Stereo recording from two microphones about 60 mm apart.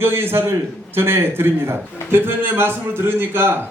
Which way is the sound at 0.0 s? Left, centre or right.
Right.